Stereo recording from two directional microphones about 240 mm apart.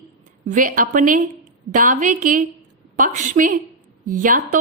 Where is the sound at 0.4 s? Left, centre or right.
Right.